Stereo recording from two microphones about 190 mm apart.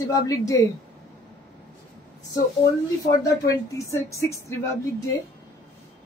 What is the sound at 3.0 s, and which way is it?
A woman's voice, 15° left (ahead or behind).